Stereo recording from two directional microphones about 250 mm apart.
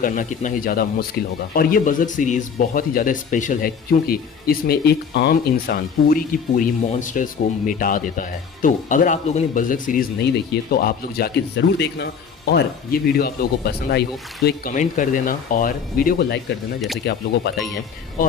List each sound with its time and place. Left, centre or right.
0.0 s speech: left